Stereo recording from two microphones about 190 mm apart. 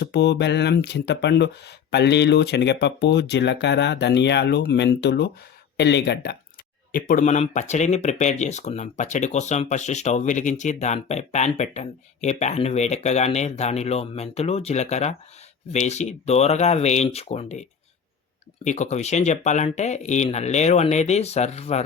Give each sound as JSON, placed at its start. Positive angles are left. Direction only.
{"t": 0.0, "sound": "speech", "side_deg": 65}
{"t": 6.9, "sound": "speech", "side_deg": 45}